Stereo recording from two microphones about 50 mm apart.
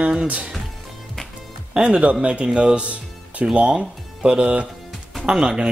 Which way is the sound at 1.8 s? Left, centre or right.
Centre.